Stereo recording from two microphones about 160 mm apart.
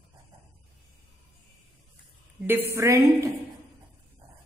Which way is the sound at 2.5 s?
15° right (ahead or behind).